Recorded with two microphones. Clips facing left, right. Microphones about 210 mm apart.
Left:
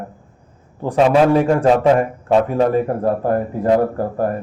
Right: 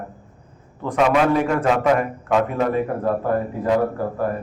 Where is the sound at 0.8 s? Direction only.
30° left (ahead or behind).